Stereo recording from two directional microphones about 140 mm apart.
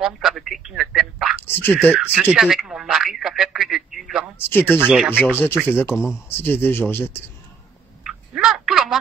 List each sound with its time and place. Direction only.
0.0 s a man's voice: centre (ahead or behind)
1.6 s speech: 15° left (ahead or behind)
2.0 s telephone: 5° right (ahead or behind)
4.5 s speech: 15° left (ahead or behind)
4.7 s speech: 5° right (ahead or behind)
5.8 s speech: 20° left (ahead or behind)
8.0 s a sound: 5° right (ahead or behind)